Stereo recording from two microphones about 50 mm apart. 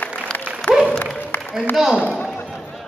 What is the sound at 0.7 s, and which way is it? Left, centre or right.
Applause, left.